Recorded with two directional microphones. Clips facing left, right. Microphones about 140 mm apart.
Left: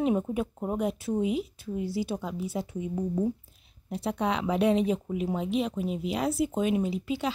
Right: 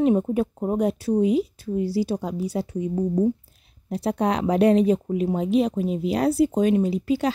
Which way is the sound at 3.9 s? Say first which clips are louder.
Right 6 dB; 40° right (ahead or behind).